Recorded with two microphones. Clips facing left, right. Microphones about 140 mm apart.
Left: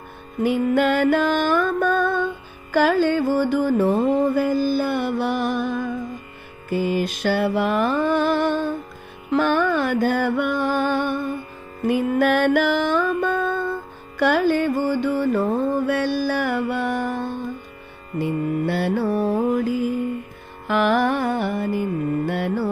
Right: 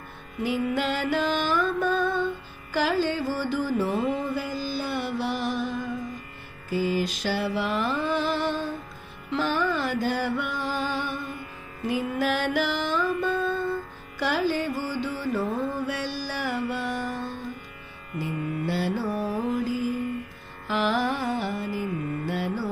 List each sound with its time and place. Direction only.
0.4 s music: 50° left (ahead or behind)
6.7 s mantra: 55° left (ahead or behind)
9.3 s music: 55° left (ahead or behind)
18.2 s mantra: 60° left (ahead or behind)
20.7 s carnatic music: 60° left (ahead or behind)
22.3 s music: 60° left (ahead or behind)